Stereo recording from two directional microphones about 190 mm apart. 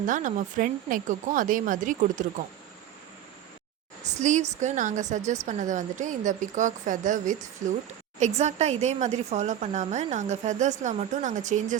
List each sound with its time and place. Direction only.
0.0 s a woman's voice: 45° right (ahead or behind)
4.2 s speech: 40° right (ahead or behind)